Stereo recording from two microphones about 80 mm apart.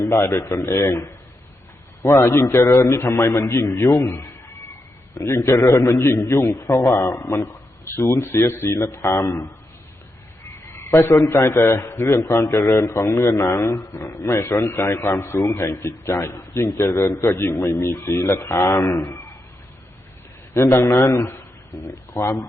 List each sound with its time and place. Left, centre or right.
0.0 s a man's voice: left
0.4 s a man's voice: left
2.1 s a man's voice: left
10.8 s frog: left
11.1 s a man's voice: left
20.5 s a man's voice: left